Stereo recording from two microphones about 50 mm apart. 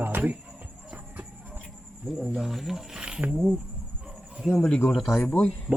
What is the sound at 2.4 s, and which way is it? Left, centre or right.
Speech, centre.